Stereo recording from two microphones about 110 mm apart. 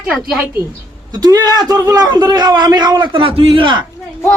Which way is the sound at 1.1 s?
40° right (ahead or behind).